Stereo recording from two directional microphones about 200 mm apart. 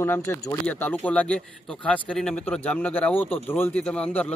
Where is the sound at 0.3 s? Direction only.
10° left (ahead or behind).